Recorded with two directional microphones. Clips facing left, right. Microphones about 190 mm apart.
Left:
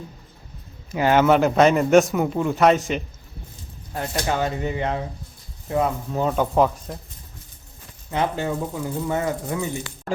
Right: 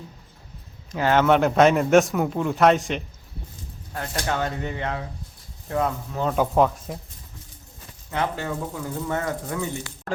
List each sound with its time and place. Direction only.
0.9 s a man's voice: 10° left (ahead or behind)
3.9 s speech: 20° left (ahead or behind)
6.3 s a man's voice: centre (ahead or behind)
8.1 s speech: 20° left (ahead or behind)